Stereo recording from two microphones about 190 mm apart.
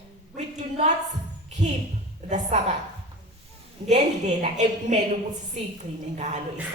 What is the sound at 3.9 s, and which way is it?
A woman's voice, 35° right (ahead or behind).